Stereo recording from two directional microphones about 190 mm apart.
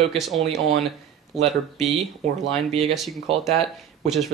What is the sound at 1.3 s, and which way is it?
Speech, centre (ahead or behind).